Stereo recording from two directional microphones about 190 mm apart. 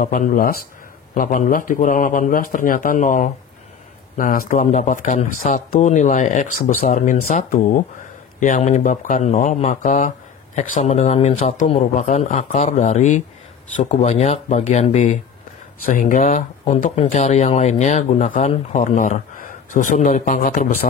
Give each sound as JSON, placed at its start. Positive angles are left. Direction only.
{"t": 0.0, "sound": "speech", "side_deg": 45}